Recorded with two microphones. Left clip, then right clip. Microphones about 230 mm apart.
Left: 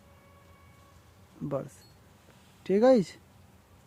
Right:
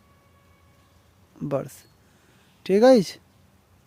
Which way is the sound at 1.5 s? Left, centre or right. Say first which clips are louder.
Right 7 dB; right.